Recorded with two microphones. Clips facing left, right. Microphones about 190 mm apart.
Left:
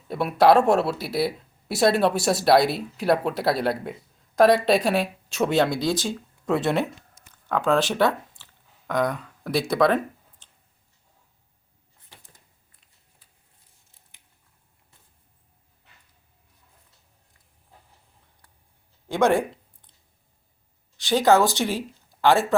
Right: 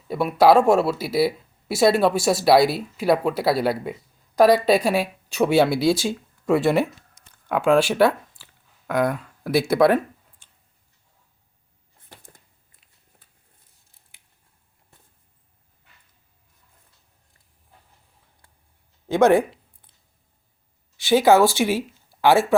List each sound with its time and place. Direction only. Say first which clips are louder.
0.1 s speech: right 2 dB; centre (ahead or behind)
12.0 s a sound: right 5 dB; 50° right (ahead or behind)
19.0 s speech: right 4 dB; 15° right (ahead or behind)
20.9 s speech: right 3 dB; 10° right (ahead or behind)